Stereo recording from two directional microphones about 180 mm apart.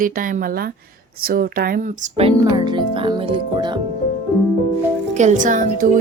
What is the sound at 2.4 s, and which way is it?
Speech, 25° right (ahead or behind).